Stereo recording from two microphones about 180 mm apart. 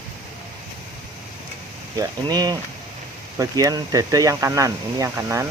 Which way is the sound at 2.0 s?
20° right (ahead or behind).